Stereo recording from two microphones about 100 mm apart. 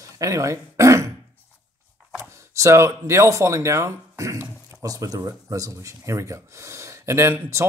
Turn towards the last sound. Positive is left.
turn(degrees=-30)  # may be behind; listen again after turning